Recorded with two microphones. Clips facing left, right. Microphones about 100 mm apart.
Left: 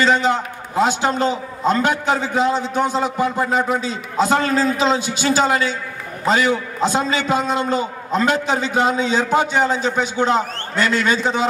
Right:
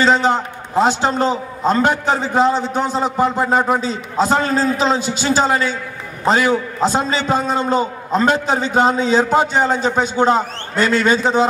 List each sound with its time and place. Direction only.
0.0 s a man's voice: 40° right (ahead or behind)